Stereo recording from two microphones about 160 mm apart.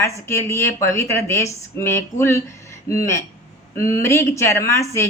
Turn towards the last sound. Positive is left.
turn(degrees=20)  # may be behind; listen again after turning